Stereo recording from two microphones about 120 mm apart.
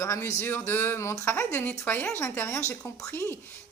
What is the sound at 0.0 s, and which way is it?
Speech, 20° left (ahead or behind).